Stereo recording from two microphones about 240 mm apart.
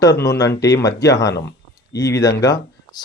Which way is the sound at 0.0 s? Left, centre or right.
Centre.